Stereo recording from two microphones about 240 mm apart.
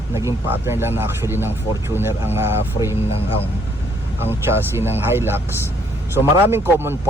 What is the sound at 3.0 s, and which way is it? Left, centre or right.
Speech, left.